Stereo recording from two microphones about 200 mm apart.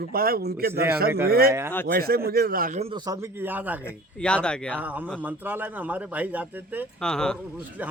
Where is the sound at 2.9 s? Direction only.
20° right (ahead or behind).